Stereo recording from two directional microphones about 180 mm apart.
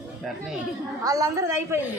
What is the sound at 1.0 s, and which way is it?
Speech, 20° right (ahead or behind).